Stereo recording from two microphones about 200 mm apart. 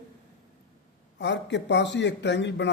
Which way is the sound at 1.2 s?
60° left (ahead or behind).